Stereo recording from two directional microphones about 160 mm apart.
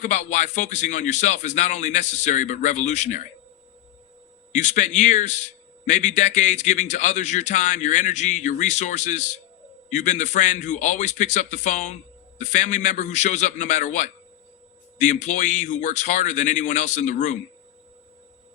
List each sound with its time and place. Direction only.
0.0 s a man's voice: 45° left (ahead or behind)
4.5 s a man's voice: 50° left (ahead or behind)